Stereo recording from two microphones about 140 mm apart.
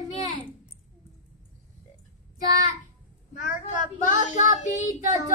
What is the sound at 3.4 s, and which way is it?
Speech, 65° left (ahead or behind).